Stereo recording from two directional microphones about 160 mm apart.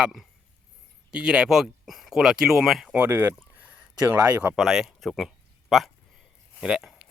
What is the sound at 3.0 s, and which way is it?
Speech, 15° right (ahead or behind).